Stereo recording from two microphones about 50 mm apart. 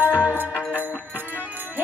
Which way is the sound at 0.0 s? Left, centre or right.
Right.